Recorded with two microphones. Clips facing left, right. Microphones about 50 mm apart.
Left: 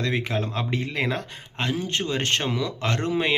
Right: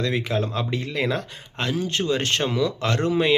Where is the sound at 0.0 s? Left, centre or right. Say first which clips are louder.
Right 2 dB; left.